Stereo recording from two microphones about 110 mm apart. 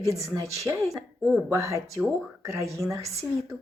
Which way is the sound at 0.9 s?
5° right (ahead or behind).